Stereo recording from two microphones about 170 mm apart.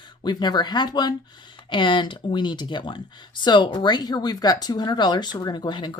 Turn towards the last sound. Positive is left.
turn(degrees=25)  # may be behind; listen again after turning